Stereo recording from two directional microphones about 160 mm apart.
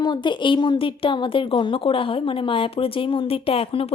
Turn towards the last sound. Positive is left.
turn(degrees=35)  # may be behind; listen again after turning